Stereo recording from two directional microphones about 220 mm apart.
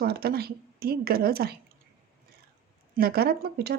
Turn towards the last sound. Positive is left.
turn(degrees=-45)  # may be behind; listen again after turning